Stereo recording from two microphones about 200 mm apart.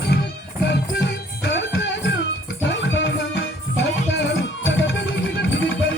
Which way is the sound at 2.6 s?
65° left (ahead or behind).